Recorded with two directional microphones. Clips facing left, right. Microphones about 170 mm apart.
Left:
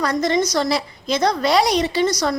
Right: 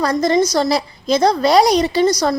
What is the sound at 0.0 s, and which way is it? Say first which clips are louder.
A woman's voice: right 4 dB; 35° right (ahead or behind).